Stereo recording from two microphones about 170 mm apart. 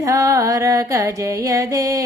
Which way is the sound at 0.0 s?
20° right (ahead or behind).